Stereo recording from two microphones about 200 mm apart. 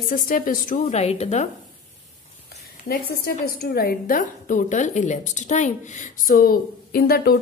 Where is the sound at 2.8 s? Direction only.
50° left (ahead or behind).